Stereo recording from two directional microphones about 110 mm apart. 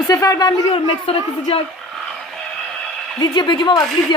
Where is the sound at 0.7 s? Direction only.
55° left (ahead or behind).